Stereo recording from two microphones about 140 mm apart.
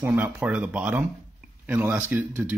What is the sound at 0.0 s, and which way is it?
Speech, 15° right (ahead or behind).